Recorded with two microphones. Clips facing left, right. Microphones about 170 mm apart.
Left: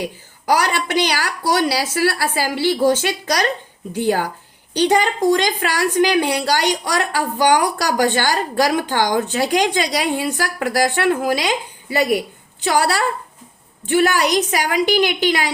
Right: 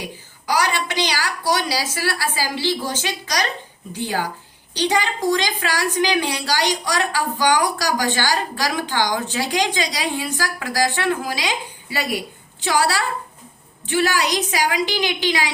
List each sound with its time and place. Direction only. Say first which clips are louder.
0.4 s a woman's voice: left 3 dB; 55° left (ahead or behind)